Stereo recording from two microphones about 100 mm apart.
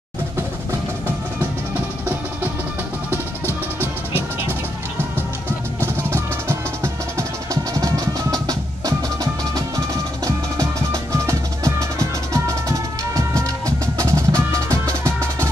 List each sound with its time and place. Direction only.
3.8 s music: 20° right (ahead or behind)
5.8 s music: 25° right (ahead or behind)